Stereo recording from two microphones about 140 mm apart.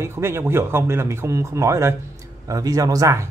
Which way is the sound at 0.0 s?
20° right (ahead or behind).